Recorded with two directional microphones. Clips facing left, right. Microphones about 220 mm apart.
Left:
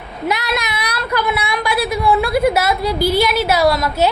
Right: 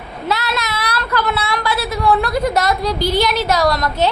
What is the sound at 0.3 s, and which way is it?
A woman's voice, 15° left (ahead or behind).